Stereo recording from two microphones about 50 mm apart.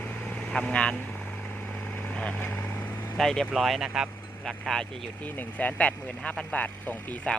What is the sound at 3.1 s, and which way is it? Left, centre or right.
Speech, centre.